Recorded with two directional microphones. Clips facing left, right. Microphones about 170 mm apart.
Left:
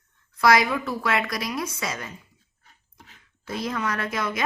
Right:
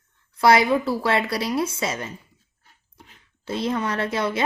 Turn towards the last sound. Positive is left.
turn(degrees=-30)  # may be behind; listen again after turning